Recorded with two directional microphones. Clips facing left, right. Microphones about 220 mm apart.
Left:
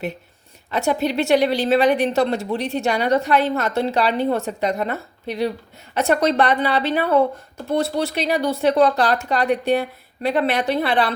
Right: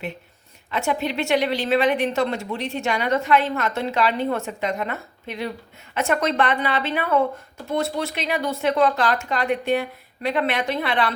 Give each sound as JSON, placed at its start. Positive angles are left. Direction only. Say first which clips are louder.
{"t": 0.7, "sound": "a woman's voice", "louder": "left 4 dB", "side_deg": 40}